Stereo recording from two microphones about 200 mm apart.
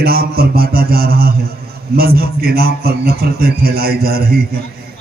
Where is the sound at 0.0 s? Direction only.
50° right (ahead or behind).